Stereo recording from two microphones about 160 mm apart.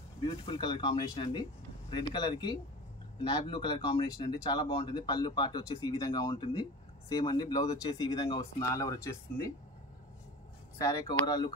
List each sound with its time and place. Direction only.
0.2 s speech: 30° left (ahead or behind)
8.1 s speech: 35° left (ahead or behind)
8.5 s speech: 20° left (ahead or behind)
10.8 s speech: 20° left (ahead or behind)